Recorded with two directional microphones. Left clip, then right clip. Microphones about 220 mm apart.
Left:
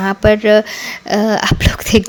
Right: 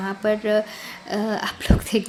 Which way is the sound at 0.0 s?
40° left (ahead or behind).